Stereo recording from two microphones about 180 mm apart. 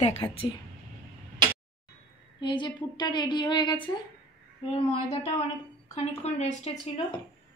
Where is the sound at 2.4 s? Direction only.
25° left (ahead or behind).